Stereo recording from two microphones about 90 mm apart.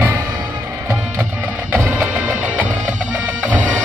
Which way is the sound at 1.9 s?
15° right (ahead or behind).